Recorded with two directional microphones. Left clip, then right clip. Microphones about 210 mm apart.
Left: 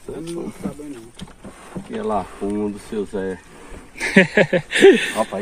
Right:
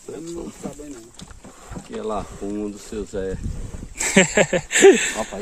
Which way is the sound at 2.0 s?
25° left (ahead or behind).